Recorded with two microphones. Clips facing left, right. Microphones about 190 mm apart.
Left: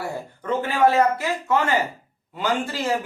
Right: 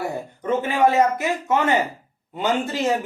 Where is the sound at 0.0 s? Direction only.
20° right (ahead or behind).